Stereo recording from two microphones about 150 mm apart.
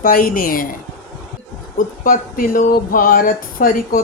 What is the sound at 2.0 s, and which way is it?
Speech, 65° left (ahead or behind).